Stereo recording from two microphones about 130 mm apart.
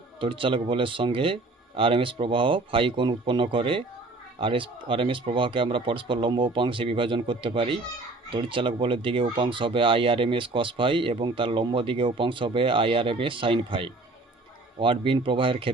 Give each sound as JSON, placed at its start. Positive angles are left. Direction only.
{"t": 0.2, "sound": "speech", "side_deg": -40}